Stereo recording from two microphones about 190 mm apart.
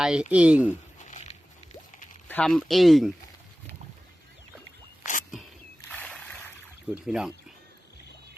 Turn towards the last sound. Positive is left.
turn(degrees=-5)  # may be behind; listen again after turning